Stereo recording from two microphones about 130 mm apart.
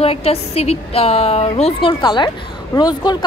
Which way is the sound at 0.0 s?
50° left (ahead or behind).